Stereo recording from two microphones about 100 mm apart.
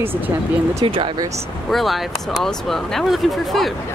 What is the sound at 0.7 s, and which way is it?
Speech, 70° right (ahead or behind).